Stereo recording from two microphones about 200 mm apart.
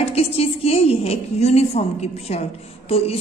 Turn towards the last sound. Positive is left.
turn(degrees=30)  # may be behind; listen again after turning